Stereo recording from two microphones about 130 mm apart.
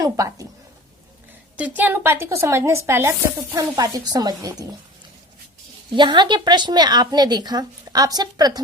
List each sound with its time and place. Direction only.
0.0 s speech: 25° right (ahead or behind)
1.5 s speech: 10° right (ahead or behind); by 4.7 s 25° right (ahead or behind)
5.9 s a woman's voice: 35° right (ahead or behind)